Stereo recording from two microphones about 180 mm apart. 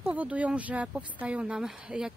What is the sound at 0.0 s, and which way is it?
Speech, 10° right (ahead or behind).